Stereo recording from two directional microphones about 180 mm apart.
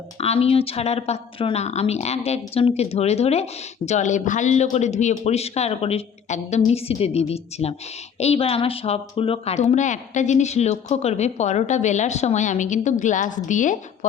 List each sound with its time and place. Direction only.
0.2 s a woman's voice: 35° left (ahead or behind)